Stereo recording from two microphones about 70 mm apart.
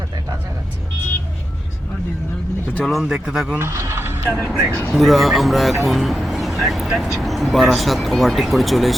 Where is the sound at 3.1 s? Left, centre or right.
Centre.